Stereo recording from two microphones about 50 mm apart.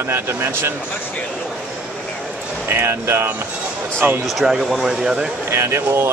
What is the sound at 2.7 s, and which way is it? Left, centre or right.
Speech, right.